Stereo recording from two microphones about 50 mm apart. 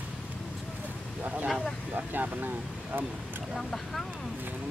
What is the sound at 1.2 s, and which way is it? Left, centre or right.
Speech, right.